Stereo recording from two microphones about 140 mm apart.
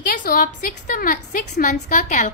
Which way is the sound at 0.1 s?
85° left.